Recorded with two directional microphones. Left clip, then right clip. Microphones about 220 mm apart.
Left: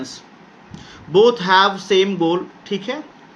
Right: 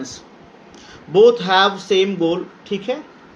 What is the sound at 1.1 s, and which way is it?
A man's voice, 35° left (ahead or behind).